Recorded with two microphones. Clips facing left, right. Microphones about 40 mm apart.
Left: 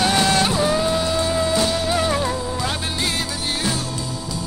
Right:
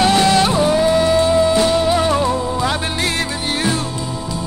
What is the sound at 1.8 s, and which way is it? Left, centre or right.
Music, centre.